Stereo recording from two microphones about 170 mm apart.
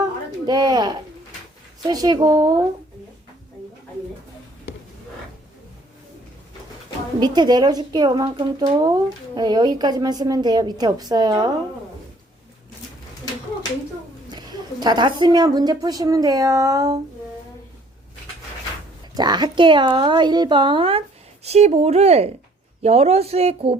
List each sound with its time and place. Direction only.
0.4 s a woman's voice: 25° right (ahead or behind)
7.2 s a woman's voice: 25° right (ahead or behind)
14.3 s a woman's voice: 25° right (ahead or behind)
19.1 s a woman's voice: 25° right (ahead or behind)